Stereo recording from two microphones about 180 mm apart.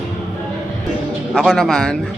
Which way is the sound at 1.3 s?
Centre (ahead or behind).